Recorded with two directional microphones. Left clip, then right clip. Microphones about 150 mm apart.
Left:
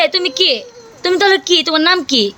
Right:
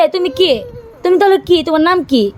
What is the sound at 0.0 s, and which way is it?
A woman's voice, 35° right (ahead or behind).